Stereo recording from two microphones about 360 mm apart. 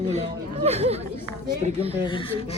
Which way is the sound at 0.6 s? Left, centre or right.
Centre.